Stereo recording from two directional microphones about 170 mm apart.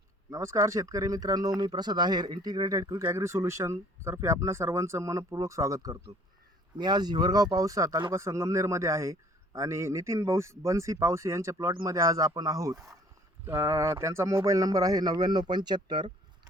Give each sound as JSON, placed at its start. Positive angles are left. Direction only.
{"t": 0.3, "sound": "speech", "side_deg": -20}